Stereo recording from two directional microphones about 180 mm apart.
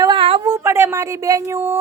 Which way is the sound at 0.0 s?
30° right (ahead or behind).